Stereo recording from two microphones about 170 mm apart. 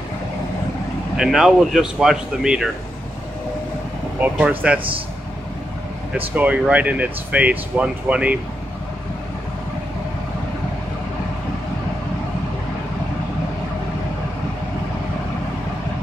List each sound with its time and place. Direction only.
1.1 s speech: 5° right (ahead or behind)
4.2 s speech: 10° right (ahead or behind)
6.1 s speech: 10° right (ahead or behind)